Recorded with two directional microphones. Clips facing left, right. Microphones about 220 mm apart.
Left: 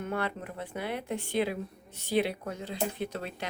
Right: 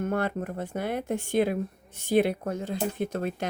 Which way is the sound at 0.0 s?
45° right (ahead or behind).